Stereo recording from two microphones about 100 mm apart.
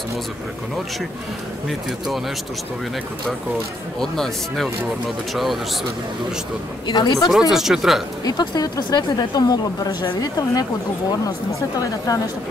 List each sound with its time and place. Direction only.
1.7 s speech: centre (ahead or behind)
4.0 s speech: 5° left (ahead or behind)
6.9 s speech: 45° left (ahead or behind)
7.2 s speech: 5° right (ahead or behind)
8.3 s speech: 40° left (ahead or behind)
12.1 s speech: 40° left (ahead or behind)